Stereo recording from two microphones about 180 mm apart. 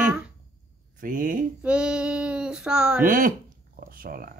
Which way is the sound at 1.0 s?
45° right (ahead or behind).